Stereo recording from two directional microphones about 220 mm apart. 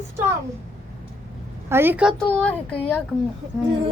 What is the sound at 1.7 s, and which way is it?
Speech, 10° right (ahead or behind).